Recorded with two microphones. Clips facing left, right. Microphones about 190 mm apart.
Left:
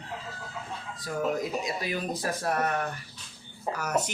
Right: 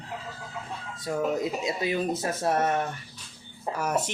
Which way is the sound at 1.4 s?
25° right (ahead or behind).